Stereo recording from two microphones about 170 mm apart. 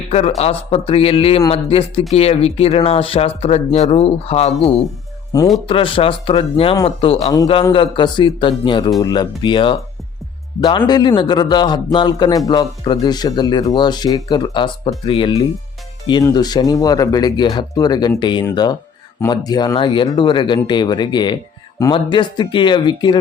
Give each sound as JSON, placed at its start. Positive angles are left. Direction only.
{"t": 0.1, "sound": "speech", "side_deg": 40}
{"t": 5.3, "sound": "speech", "side_deg": 20}
{"t": 5.6, "sound": "speech", "side_deg": 30}